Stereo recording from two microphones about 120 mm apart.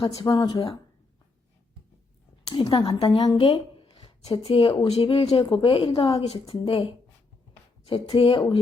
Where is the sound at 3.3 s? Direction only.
50° left (ahead or behind).